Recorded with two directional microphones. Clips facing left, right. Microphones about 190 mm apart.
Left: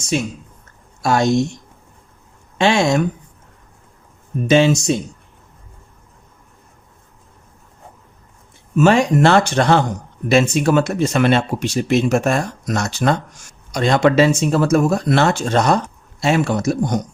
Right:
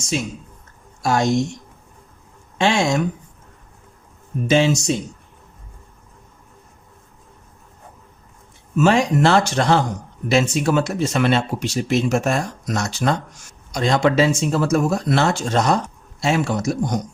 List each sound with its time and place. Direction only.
0.1 s speech: 65° left (ahead or behind)
2.6 s speech: 60° left (ahead or behind)
4.4 s speech: 60° left (ahead or behind)
8.8 s speech: 60° left (ahead or behind)